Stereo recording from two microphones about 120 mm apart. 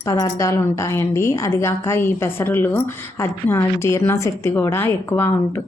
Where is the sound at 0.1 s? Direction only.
30° left (ahead or behind).